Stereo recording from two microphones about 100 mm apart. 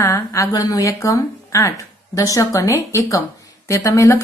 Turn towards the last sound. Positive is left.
turn(degrees=30)  # may be behind; listen again after turning